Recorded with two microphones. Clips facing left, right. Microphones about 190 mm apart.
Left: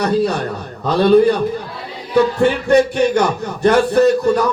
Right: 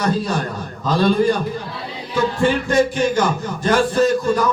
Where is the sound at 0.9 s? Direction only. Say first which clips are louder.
Left 5 dB; 65° left (ahead or behind).